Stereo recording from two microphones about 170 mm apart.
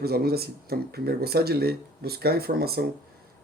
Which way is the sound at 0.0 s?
65° right (ahead or behind).